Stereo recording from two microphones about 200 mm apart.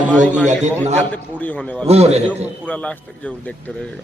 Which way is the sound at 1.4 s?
10° left (ahead or behind).